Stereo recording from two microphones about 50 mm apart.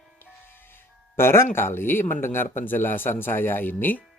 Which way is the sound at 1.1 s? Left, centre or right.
Left.